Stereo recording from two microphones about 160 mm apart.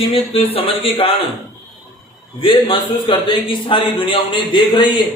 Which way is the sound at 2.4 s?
35° left (ahead or behind).